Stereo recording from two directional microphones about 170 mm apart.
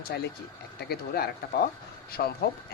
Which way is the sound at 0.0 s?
70° left (ahead or behind).